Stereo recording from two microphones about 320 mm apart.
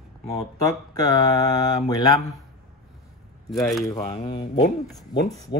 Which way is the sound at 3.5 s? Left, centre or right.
Centre.